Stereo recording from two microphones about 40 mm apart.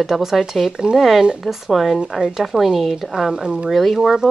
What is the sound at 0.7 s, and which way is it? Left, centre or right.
A woman's voice, centre.